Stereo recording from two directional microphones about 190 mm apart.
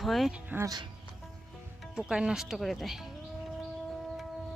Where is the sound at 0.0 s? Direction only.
Centre (ahead or behind).